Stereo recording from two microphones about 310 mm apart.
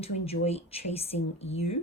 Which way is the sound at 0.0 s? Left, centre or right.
Centre.